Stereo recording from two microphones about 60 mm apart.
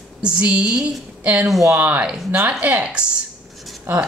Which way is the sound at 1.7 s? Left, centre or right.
Right.